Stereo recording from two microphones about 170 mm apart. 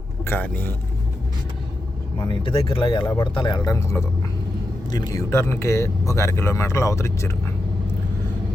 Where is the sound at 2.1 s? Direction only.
30° left (ahead or behind).